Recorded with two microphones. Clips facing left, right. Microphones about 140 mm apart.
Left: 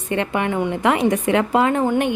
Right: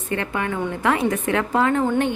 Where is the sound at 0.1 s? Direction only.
20° left (ahead or behind).